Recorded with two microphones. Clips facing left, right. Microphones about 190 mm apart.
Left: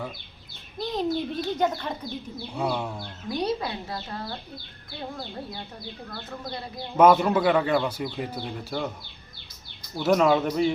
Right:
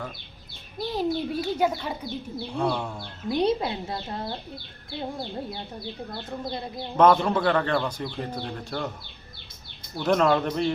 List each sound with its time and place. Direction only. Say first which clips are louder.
0.8 s a child's voice: even; 10° right (ahead or behind)
2.6 s speech: right 1 dB; 5° left (ahead or behind)
3.2 s speech: right 4 dB; 25° right (ahead or behind)
6.1 s speech: right 2 dB; 25° right (ahead or behind)
6.9 s speech: left 1 dB; 5° left (ahead or behind)
9.9 s speech: left 1 dB; 5° left (ahead or behind)